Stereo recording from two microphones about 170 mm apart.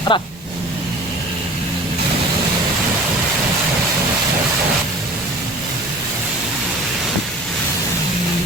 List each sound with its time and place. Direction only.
0.1 s speech: 30° left (ahead or behind)